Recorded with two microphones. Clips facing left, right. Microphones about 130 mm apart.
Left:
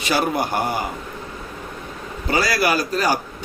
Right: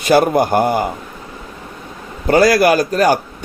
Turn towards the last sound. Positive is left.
turn(degrees=-50)  # may be behind; listen again after turning